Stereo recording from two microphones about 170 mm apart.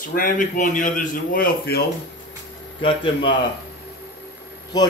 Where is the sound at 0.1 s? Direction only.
55° left (ahead or behind).